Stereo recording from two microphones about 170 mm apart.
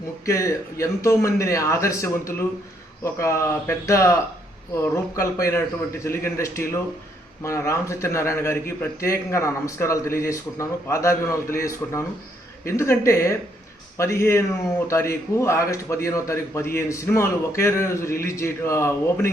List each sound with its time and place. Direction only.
0.3 s a man's voice: 15° left (ahead or behind)